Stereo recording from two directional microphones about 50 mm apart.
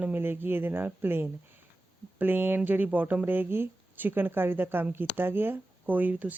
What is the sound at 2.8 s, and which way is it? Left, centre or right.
Speech, right.